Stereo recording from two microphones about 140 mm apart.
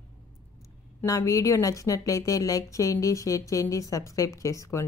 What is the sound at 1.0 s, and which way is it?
A woman's voice, 25° left (ahead or behind).